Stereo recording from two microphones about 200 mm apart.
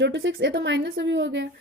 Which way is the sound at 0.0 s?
60° right (ahead or behind).